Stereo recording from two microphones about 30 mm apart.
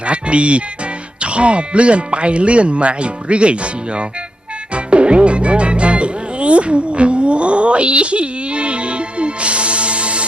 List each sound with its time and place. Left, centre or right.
0.0 s speech: right
4.7 s music: right